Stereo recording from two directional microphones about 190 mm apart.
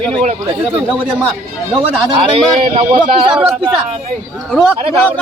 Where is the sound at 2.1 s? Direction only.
30° right (ahead or behind).